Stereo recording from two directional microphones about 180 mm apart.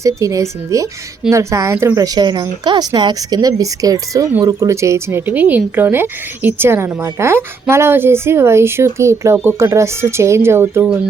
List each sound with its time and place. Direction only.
0.0 s speech: 15° right (ahead or behind)